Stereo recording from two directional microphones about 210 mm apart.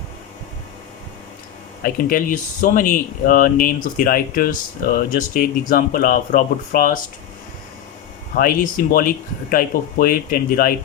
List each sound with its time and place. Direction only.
1.8 s speech: 45° left (ahead or behind)
8.4 s speech: 40° left (ahead or behind)